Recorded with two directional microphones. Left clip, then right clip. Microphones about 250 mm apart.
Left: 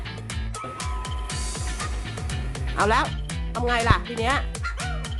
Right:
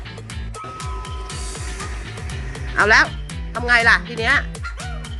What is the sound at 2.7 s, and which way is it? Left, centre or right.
Speech, centre.